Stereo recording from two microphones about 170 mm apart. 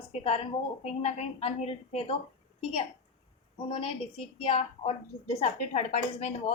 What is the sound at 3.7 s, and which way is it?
A woman's voice, 35° left (ahead or behind).